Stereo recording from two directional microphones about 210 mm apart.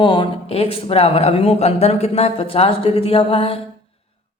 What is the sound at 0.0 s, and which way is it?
Speech, 25° left (ahead or behind).